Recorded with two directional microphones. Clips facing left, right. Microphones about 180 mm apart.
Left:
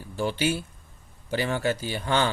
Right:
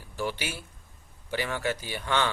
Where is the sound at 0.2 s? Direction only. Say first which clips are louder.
Left 7 dB; 30° left (ahead or behind).